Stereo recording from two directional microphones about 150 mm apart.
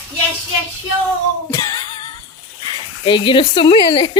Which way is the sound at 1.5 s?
30° left (ahead or behind).